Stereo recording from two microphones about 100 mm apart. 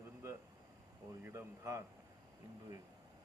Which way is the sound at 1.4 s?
30° right (ahead or behind).